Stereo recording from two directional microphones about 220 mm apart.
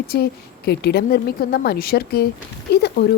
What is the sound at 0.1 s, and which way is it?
Speech, 45° left (ahead or behind).